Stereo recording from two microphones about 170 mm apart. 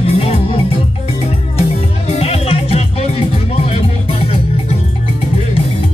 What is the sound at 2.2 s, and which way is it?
Music, 40° left (ahead or behind).